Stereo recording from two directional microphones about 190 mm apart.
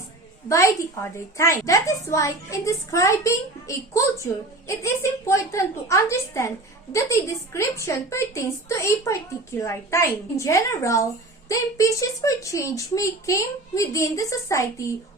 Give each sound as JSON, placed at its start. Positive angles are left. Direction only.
{"t": 0.4, "sound": "speech", "side_deg": 15}